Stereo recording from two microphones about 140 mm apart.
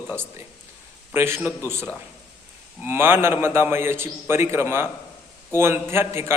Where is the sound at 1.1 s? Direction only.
15° right (ahead or behind).